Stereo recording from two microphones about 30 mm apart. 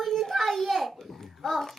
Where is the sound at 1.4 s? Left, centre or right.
Centre.